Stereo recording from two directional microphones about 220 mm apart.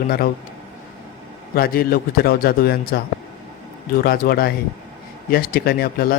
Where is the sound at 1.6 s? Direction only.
40° left (ahead or behind).